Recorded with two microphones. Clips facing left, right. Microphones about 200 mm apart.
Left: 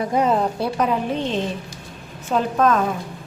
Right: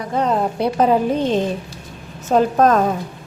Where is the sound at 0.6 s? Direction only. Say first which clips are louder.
Right 5 dB; 30° right (ahead or behind).